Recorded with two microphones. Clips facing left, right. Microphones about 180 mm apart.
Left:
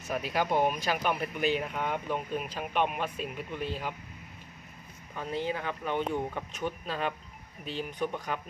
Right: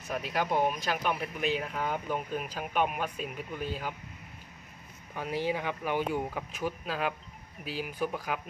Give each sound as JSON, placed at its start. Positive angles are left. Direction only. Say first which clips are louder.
{"t": 0.1, "sound": "speech", "louder": "left 1 dB", "side_deg": 0}
{"t": 5.1, "sound": "speech", "louder": "right 1 dB", "side_deg": -10}